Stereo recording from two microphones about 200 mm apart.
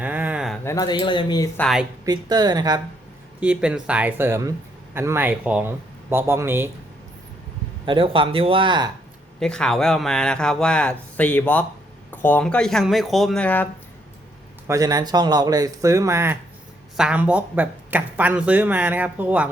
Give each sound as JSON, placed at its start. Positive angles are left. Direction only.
{"t": 0.0, "sound": "a sound", "side_deg": -10}
{"t": 0.6, "sound": "speech", "side_deg": 15}
{"t": 1.5, "sound": "speech", "side_deg": 0}
{"t": 2.0, "sound": "speech", "side_deg": -20}
{"t": 3.4, "sound": "speech", "side_deg": -5}
{"t": 7.9, "sound": "speech", "side_deg": -25}
{"t": 9.4, "sound": "speech", "side_deg": 5}
{"t": 14.7, "sound": "speech", "side_deg": -20}